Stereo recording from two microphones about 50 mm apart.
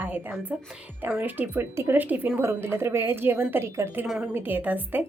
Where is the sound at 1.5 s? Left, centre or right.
Right.